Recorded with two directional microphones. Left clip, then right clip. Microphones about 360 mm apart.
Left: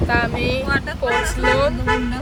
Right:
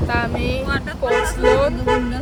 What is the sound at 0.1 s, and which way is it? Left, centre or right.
Speech, centre.